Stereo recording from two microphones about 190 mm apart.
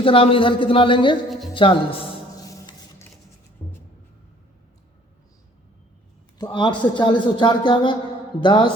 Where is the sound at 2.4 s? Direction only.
20° left (ahead or behind).